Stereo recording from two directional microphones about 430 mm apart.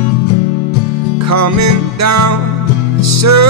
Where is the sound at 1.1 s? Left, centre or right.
Right.